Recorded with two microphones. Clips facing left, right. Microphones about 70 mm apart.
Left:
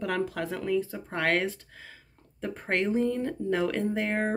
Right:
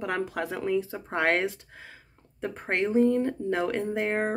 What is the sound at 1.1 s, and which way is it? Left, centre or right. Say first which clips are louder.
Speech: right 2 dB; centre.